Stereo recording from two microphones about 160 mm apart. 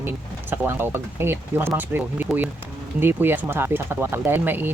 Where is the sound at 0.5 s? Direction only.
15° right (ahead or behind).